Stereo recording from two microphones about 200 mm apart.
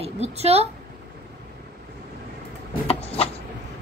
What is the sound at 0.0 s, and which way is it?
Speech, 30° right (ahead or behind).